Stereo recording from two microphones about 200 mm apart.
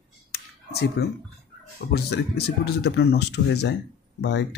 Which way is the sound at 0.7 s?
50° left (ahead or behind).